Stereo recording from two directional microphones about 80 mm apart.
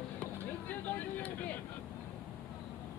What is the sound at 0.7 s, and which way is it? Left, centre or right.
Vehicle, left.